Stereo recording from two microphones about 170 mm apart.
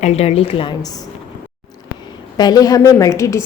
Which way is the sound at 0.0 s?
35° left (ahead or behind).